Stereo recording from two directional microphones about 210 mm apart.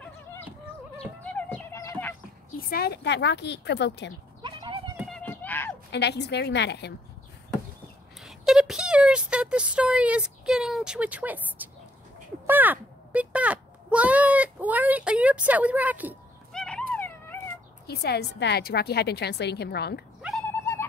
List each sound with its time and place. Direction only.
1.3 s music: 10° left (ahead or behind)
2.7 s a woman's voice: 50° left (ahead or behind)
4.4 s horse: 20° right (ahead or behind)
4.9 s a sound: centre (ahead or behind)
5.9 s a woman's voice: 55° left (ahead or behind)
8.2 s speech: centre (ahead or behind)
12.4 s a sound: 10° right (ahead or behind)
16.5 s dog: 5° left (ahead or behind)
17.8 s a woman's voice: 50° left (ahead or behind)
20.2 s cat: centre (ahead or behind)